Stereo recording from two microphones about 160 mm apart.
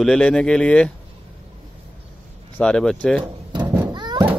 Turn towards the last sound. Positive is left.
turn(degrees=-25)  # may be behind; listen again after turning